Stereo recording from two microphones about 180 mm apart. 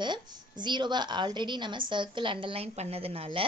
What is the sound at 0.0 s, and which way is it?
A woman's voice, 25° right (ahead or behind).